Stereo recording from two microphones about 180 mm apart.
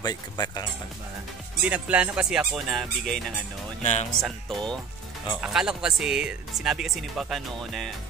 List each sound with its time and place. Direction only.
0.0 s speech: 20° left (ahead or behind)
1.7 s speech: 5° right (ahead or behind)
3.8 s speech: 40° left (ahead or behind)
4.2 s speech: 5° left (ahead or behind)